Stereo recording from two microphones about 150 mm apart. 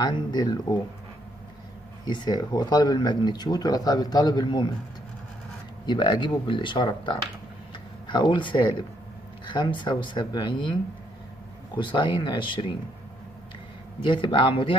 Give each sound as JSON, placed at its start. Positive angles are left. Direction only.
{"t": 0.0, "sound": "speech", "side_deg": 30}
{"t": 2.0, "sound": "speech", "side_deg": 30}
{"t": 5.9, "sound": "speech", "side_deg": 30}
{"t": 14.0, "sound": "speech", "side_deg": 35}